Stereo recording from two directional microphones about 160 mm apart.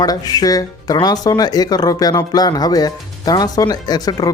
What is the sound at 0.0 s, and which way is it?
Speech, 25° left (ahead or behind).